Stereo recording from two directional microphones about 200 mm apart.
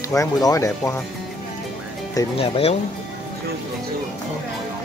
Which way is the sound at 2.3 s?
30° left (ahead or behind).